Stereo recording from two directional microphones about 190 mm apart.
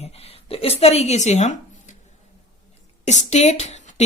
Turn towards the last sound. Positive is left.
turn(degrees=35)  # may be behind; listen again after turning